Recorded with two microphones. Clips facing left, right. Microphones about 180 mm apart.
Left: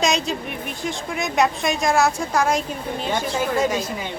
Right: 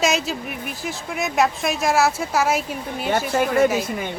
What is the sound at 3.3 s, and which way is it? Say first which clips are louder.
Speech: right 5 dB; 55° right (ahead or behind).